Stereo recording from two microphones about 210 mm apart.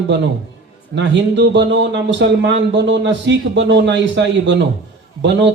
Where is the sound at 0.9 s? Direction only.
55° right (ahead or behind).